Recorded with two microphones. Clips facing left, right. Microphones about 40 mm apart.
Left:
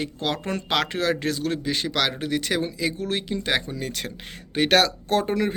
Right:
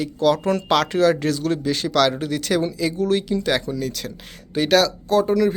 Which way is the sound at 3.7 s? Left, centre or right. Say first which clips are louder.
Right 4 dB; left.